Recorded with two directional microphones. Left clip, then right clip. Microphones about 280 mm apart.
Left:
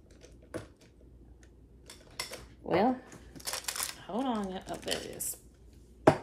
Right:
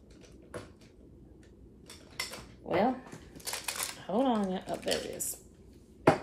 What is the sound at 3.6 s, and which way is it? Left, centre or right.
Speech, centre.